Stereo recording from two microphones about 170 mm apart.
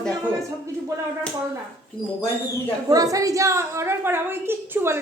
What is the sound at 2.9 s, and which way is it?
A woman's voice, 20° right (ahead or behind).